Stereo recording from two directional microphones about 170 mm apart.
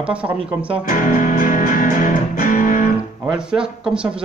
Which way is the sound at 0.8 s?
50° left (ahead or behind).